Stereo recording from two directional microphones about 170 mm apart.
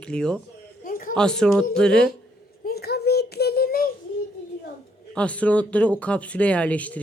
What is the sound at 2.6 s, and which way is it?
Child singing, 70° left (ahead or behind).